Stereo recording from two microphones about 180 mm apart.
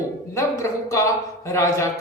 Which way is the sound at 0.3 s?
15° left (ahead or behind).